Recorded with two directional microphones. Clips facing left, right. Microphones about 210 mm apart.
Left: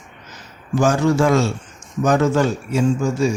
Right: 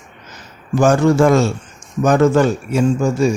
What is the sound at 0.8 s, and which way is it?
Speech, 55° right (ahead or behind).